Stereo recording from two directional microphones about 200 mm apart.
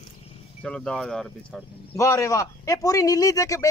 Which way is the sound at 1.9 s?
15° left (ahead or behind).